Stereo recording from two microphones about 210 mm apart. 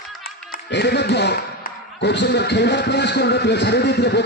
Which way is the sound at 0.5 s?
55° left (ahead or behind).